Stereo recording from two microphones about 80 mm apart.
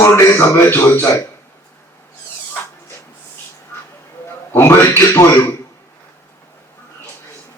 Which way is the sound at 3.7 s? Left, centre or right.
Left.